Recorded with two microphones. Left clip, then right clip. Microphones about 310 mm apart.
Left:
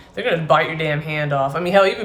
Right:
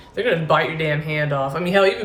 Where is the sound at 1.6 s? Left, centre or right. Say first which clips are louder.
Left 2 dB; centre.